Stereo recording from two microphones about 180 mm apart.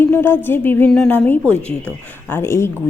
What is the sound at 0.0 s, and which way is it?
Speech, 10° left (ahead or behind).